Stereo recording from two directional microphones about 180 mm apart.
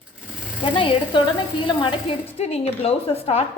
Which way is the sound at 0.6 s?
30° left (ahead or behind).